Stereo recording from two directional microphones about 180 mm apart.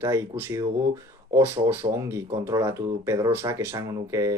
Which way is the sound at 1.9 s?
15° right (ahead or behind).